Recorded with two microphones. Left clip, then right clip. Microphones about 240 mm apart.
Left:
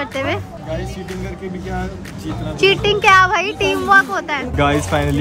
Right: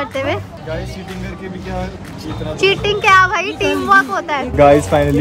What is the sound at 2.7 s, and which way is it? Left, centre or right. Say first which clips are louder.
Speech: even; centre.